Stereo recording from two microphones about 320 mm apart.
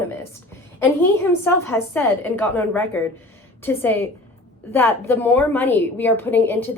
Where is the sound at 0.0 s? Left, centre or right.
Centre.